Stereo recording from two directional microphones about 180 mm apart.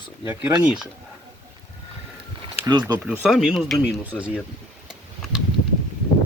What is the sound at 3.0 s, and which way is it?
Speech, 5° right (ahead or behind).